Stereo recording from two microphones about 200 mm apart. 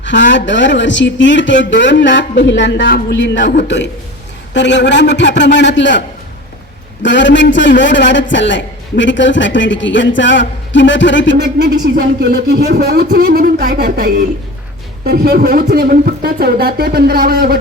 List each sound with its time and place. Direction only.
0.0 s a man's voice: 65° left (ahead or behind)
4.5 s a man's voice: 60° left (ahead or behind)
7.0 s a man's voice: 65° left (ahead or behind)
11.3 s speech: 55° right (ahead or behind)